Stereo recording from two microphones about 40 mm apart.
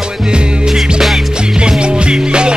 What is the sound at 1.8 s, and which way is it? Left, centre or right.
Music, right.